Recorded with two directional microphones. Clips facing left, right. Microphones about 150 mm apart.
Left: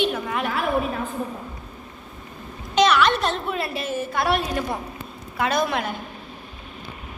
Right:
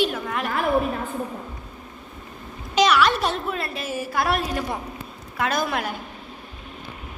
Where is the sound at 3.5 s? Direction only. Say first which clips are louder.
Left 2 dB; centre (ahead or behind).